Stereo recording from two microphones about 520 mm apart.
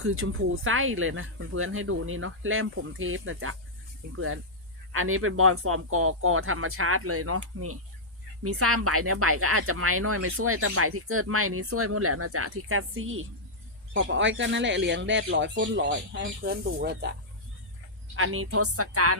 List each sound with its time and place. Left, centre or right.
0.0 s speech: right
4.9 s speech: right
18.2 s speech: right